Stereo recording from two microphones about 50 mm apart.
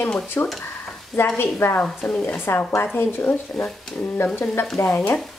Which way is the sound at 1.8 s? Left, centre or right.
Left.